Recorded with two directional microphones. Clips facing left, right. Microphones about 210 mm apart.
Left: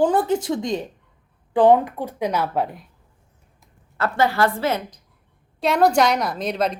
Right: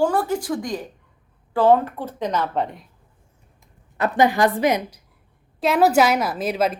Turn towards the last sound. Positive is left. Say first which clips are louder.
# right 1 dB
turn(degrees=-5)  # may be behind; listen again after turning